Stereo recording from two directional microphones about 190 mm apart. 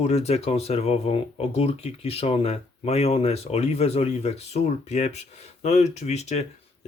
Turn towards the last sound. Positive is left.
turn(degrees=35)  # may be behind; listen again after turning